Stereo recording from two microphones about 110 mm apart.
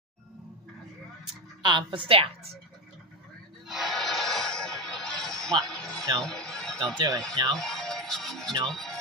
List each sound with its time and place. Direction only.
1.6 s a woman's voice: 45° right (ahead or behind)
3.6 s music: centre (ahead or behind)
6.2 s a sound: 5° left (ahead or behind)
7.5 s speech: 5° left (ahead or behind)